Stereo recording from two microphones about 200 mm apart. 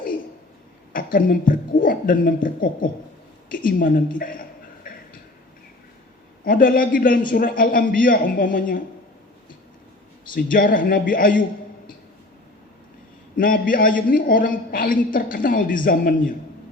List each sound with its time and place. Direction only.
0.9 s a man's voice: 45° left (ahead or behind)
3.5 s a sound: 45° left (ahead or behind)
6.4 s a man's voice: 45° left (ahead or behind)
10.3 s a man's voice: 45° left (ahead or behind)
13.3 s a man's voice: 45° left (ahead or behind)